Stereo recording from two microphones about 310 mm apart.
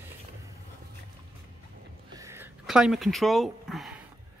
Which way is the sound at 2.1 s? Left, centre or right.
Centre.